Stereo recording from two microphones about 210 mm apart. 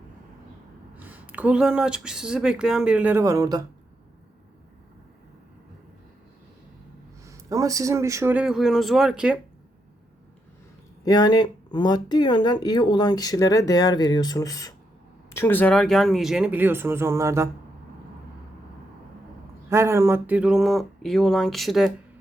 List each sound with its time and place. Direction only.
0.9 s speech: 10° right (ahead or behind)
7.3 s speech: 15° right (ahead or behind)
11.0 s speech: 20° left (ahead or behind); by 17.5 s 15° right (ahead or behind)
19.7 s speech: 15° right (ahead or behind)